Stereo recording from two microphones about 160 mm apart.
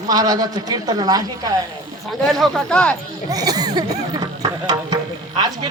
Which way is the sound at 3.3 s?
25° right (ahead or behind).